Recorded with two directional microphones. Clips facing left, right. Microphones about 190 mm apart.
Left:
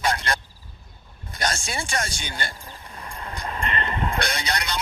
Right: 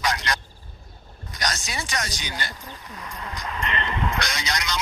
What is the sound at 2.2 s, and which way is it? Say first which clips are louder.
Speech: left 1 dB; 50° left (ahead or behind).